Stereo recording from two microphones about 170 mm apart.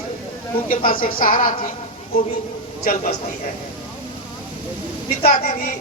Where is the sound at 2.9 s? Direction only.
60° left (ahead or behind).